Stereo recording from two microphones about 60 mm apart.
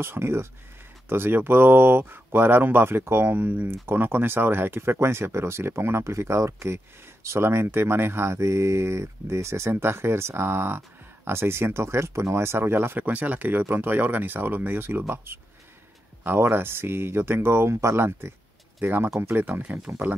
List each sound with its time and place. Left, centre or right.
0.0 s speech: right
13.0 s speech: right
17.7 s speech: right